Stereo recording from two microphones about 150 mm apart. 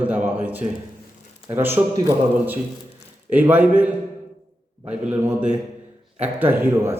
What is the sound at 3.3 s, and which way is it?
A man's voice, 10° right (ahead or behind).